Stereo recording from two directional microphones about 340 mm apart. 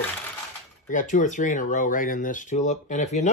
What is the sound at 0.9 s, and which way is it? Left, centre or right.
Speech, left.